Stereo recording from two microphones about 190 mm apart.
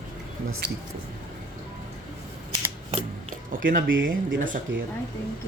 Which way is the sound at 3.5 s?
45° right (ahead or behind).